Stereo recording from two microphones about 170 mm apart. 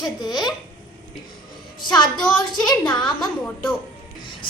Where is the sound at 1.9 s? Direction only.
25° left (ahead or behind).